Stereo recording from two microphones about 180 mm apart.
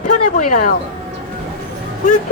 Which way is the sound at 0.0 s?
45° left (ahead or behind).